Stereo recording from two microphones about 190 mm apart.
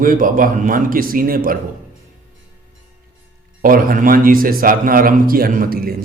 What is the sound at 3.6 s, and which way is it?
A man's voice, 50° right (ahead or behind).